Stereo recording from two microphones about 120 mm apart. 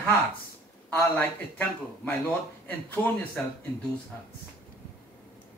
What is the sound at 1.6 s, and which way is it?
Speech, 15° left (ahead or behind).